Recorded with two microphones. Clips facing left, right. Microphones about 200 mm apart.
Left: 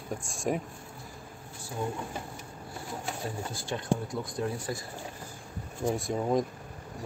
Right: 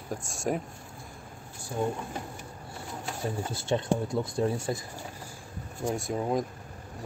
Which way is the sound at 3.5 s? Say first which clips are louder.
Right 3 dB; 25° right (ahead or behind).